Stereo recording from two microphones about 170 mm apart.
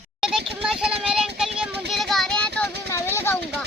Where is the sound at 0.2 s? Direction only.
5° right (ahead or behind); by 3.3 s 15° left (ahead or behind).